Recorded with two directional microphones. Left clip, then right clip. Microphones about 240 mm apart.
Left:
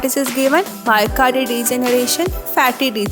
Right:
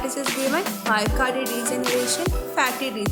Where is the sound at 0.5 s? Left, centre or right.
Left.